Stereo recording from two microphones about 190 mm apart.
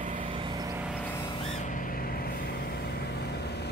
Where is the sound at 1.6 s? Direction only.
45° left (ahead or behind).